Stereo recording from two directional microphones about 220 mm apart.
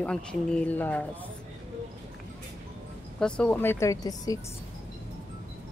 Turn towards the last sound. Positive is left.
turn(degrees=15)  # may be behind; listen again after turning